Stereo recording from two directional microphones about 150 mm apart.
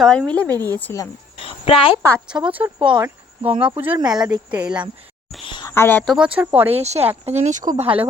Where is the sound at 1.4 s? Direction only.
40° left (ahead or behind).